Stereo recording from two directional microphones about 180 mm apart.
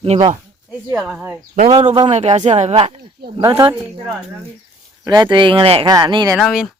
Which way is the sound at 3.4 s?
20° right (ahead or behind).